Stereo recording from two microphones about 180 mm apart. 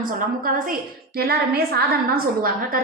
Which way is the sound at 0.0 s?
50° right (ahead or behind).